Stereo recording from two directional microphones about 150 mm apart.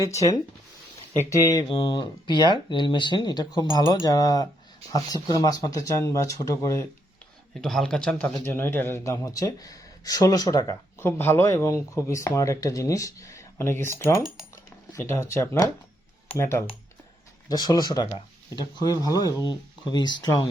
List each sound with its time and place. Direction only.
1.3 s speech: 25° left (ahead or behind)
7.5 s speech: centre (ahead or behind); by 20.5 s 30° left (ahead or behind)